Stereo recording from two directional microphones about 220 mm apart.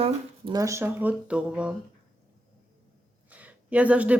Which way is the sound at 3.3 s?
5° right (ahead or behind).